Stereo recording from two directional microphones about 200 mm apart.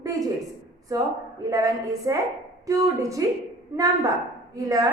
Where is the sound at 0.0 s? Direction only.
15° right (ahead or behind).